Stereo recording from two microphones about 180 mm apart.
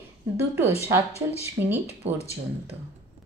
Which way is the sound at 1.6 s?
20° right (ahead or behind).